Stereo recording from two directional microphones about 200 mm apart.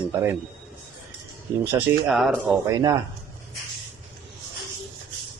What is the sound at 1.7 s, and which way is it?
Speech, centre (ahead or behind).